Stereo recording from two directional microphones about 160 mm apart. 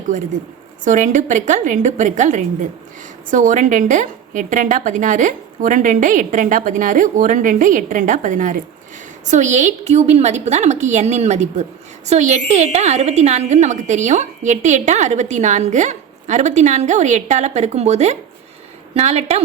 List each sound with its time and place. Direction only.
0.9 s a woman's voice: 50° right (ahead or behind)